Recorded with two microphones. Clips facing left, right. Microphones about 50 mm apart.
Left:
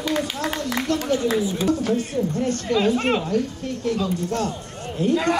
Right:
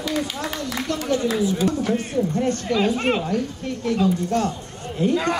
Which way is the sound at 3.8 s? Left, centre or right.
Right.